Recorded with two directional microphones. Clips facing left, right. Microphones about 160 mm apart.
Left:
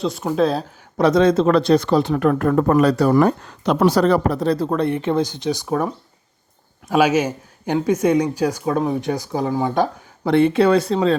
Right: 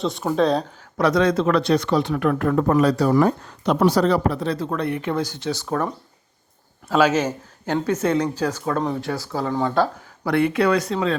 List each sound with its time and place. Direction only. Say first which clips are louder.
0.0 s speech: left 1 dB; centre (ahead or behind)
0.9 s speech: left 4 dB; 25° left (ahead or behind)